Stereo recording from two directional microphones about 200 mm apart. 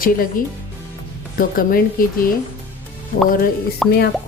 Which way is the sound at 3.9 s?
55° left (ahead or behind).